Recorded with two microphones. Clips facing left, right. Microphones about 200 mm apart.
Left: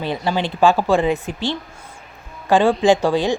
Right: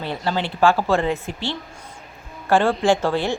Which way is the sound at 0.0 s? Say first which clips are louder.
Left 3 dB; 15° left (ahead or behind).